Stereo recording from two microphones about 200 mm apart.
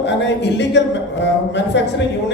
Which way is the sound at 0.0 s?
60° left (ahead or behind).